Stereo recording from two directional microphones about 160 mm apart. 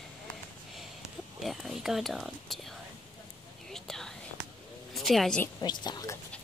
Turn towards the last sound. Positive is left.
turn(degrees=25)  # may be behind; listen again after turning